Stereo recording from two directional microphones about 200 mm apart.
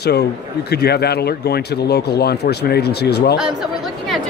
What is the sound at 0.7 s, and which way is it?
Speech, 55° left (ahead or behind).